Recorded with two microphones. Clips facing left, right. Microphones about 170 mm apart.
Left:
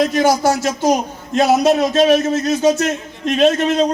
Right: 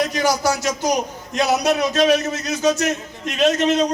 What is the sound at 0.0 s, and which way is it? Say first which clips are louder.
Speech: left 5 dB; 25° left (ahead or behind).